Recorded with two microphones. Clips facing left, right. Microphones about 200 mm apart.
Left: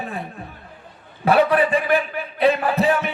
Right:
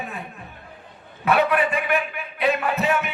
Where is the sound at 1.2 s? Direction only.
35° left (ahead or behind).